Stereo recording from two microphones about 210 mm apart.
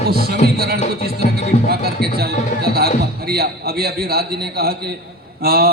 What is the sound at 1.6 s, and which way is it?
A man's voice, 50° right (ahead or behind).